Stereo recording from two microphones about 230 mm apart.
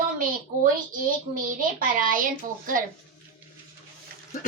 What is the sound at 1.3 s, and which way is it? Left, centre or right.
Speech, right.